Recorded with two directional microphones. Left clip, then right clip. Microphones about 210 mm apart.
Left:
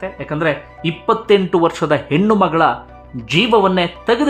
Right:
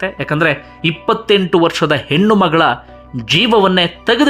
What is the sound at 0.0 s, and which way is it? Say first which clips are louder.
Speech: right 4 dB; 15° right (ahead or behind).